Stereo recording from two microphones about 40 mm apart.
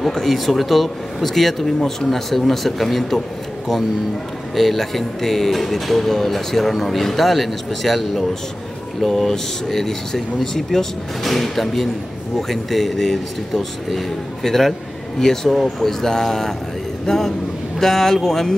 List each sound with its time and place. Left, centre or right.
0.0 s speech: centre
4.6 s a man's voice: centre